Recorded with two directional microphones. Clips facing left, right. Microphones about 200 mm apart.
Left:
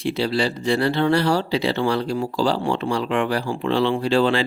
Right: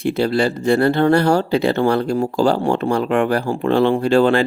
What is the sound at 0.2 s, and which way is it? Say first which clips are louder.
Speech: right 5 dB; 50° right (ahead or behind).